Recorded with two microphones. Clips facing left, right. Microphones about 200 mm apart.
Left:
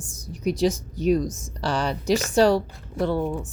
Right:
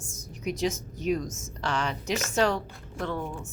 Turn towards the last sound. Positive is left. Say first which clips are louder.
# left 8 dB
turn(degrees=35)  # may be behind; listen again after turning